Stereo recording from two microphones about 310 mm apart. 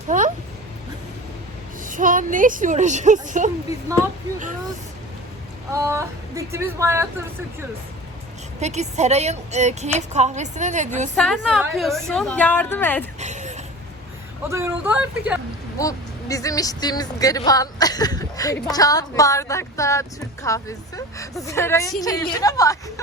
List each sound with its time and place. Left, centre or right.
0.1 s speech: right
1.8 s a woman's voice: right
5.7 s a woman's voice: centre
8.6 s a woman's voice: right
11.2 s a woman's voice: centre
13.1 s a sound: right
14.4 s a woman's voice: centre
15.8 s speech: centre